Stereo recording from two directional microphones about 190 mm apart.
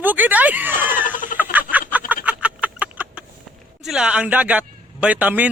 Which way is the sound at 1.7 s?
10° right (ahead or behind).